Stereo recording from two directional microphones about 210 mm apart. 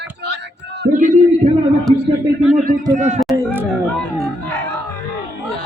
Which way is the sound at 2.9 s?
35° right (ahead or behind).